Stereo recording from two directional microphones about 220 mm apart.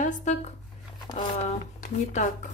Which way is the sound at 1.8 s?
35° left (ahead or behind).